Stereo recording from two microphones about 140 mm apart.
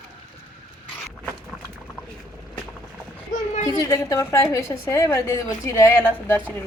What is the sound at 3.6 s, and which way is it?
A woman's voice, 25° left (ahead or behind).